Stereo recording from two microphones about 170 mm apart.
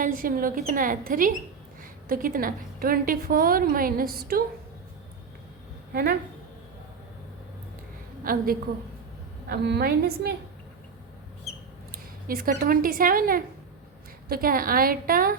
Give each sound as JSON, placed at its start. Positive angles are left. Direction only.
{"t": 0.0, "sound": "a woman's voice", "side_deg": -55}
{"t": 5.9, "sound": "a woman's voice", "side_deg": -65}
{"t": 8.2, "sound": "a woman's voice", "side_deg": -55}
{"t": 9.5, "sound": "a woman's voice", "side_deg": -65}
{"t": 11.9, "sound": "a woman's voice", "side_deg": -60}